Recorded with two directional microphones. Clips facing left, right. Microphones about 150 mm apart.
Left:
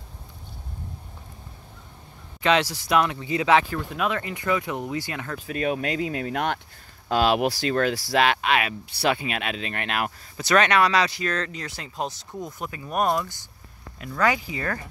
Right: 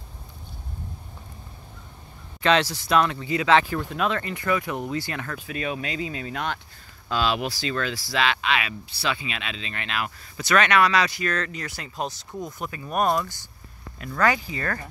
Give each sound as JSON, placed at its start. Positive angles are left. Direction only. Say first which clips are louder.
{"t": 2.4, "sound": "speech", "louder": "even", "side_deg": 10}
{"t": 3.5, "sound": "speech", "louder": "right 2 dB", "side_deg": 10}
{"t": 5.5, "sound": "speech", "louder": "left 5 dB", "side_deg": 45}
{"t": 10.3, "sound": "speech", "louder": "even", "side_deg": 35}